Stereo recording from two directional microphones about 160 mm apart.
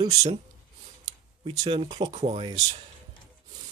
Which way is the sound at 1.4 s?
35° right (ahead or behind).